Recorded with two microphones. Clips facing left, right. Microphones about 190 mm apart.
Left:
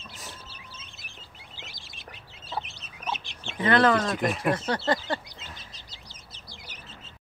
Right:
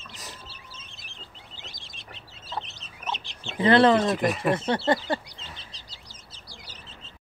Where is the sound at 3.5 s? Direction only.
30° right (ahead or behind).